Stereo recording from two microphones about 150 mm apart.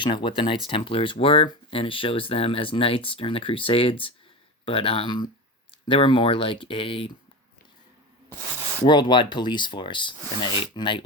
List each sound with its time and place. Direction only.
0.0 s speech: 30° left (ahead or behind)
8.8 s speech: 30° left (ahead or behind)